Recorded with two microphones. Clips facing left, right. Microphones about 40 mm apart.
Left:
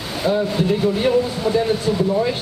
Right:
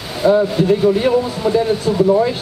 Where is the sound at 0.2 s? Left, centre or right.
Centre.